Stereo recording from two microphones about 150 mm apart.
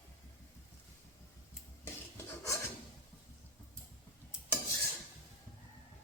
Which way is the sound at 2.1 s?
20° left (ahead or behind).